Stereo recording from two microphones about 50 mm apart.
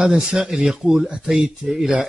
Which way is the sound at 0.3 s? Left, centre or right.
Centre.